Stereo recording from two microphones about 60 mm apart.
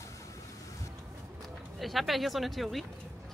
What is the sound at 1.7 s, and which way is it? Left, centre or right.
Speech, centre.